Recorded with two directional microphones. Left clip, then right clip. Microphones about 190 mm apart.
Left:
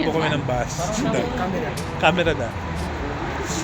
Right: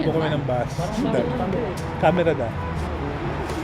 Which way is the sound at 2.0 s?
15° right (ahead or behind).